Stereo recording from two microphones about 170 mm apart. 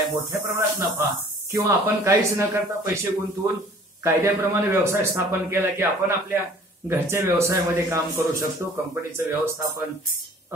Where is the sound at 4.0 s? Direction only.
15° right (ahead or behind).